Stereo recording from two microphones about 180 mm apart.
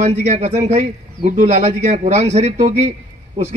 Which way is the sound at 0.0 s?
35° right (ahead or behind).